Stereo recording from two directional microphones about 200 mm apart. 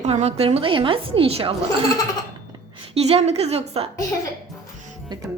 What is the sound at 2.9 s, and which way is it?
A woman's voice, 30° right (ahead or behind).